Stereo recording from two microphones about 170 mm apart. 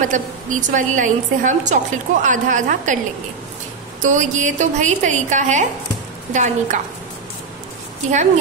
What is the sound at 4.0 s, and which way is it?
A woman's voice, 45° right (ahead or behind).